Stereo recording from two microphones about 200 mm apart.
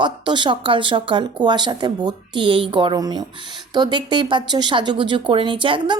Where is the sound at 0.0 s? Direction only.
25° right (ahead or behind).